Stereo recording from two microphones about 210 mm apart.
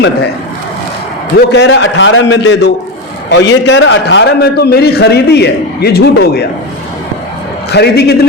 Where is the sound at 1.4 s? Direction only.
55° left (ahead or behind).